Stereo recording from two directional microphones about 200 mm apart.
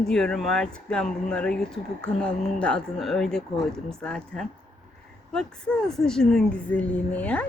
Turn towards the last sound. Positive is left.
turn(degrees=5)  # may be behind; listen again after turning